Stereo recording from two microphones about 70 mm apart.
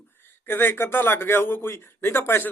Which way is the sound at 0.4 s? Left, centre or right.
Left.